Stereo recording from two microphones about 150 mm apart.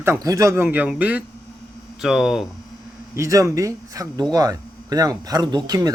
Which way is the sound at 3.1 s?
20° right (ahead or behind).